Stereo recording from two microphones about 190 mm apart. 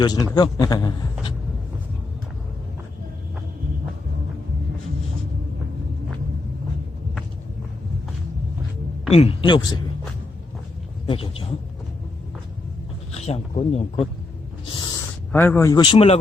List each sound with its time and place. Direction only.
0.0 s a man's voice: 20° left (ahead or behind)
9.0 s speech: 30° left (ahead or behind)
11.0 s speech: 30° left (ahead or behind)
13.1 s a sound: 35° left (ahead or behind)
13.6 s speech: 30° left (ahead or behind)
14.7 s owl: 20° left (ahead or behind)
15.3 s a man's voice: 10° left (ahead or behind); by 16.1 s 30° left (ahead or behind)